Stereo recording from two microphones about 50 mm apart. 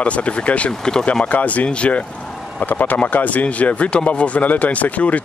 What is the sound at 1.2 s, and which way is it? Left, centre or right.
Speech, left.